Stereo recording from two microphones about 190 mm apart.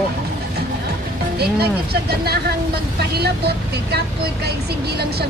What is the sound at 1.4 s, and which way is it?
Speech, 55° right (ahead or behind).